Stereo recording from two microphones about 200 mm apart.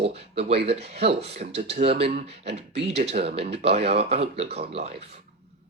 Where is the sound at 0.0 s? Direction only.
30° right (ahead or behind).